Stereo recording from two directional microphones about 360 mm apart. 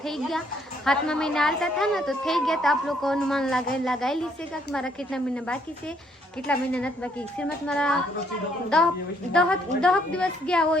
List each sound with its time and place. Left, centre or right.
0.0 s a woman's voice: centre